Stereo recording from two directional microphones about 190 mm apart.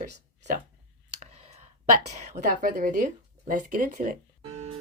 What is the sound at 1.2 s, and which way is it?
Clicking, 35° right (ahead or behind).